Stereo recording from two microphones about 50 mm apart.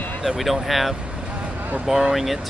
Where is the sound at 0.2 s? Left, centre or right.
Centre.